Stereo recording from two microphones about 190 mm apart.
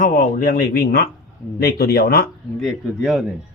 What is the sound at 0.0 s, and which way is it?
Speech, 45° left (ahead or behind).